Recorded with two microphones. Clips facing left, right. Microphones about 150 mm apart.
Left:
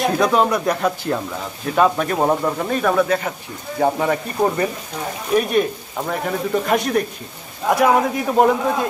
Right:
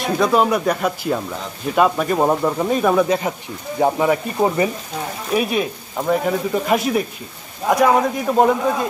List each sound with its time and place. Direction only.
0.0 s speech: centre (ahead or behind)